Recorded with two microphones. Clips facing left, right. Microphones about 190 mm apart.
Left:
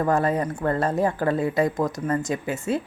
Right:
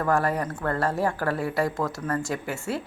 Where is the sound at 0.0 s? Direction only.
20° left (ahead or behind).